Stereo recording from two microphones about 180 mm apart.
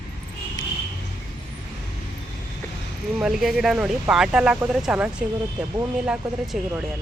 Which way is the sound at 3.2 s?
Centre (ahead or behind).